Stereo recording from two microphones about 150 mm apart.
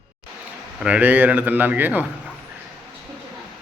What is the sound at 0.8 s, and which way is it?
Speech, 10° right (ahead or behind).